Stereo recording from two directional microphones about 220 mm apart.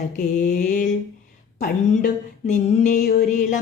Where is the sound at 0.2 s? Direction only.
35° left (ahead or behind).